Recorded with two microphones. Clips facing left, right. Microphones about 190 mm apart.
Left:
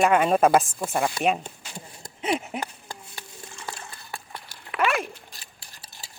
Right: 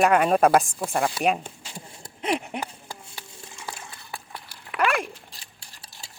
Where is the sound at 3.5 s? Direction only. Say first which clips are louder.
Even; 10° right (ahead or behind).